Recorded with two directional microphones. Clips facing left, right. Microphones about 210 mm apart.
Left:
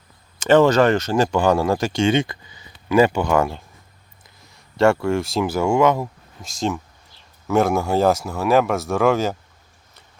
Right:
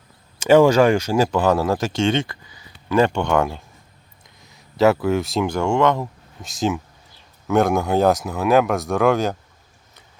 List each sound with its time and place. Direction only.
0.4 s speech: 10° right (ahead or behind)
2.1 s a sound: 20° left (ahead or behind)
2.9 s speech: 5° left (ahead or behind)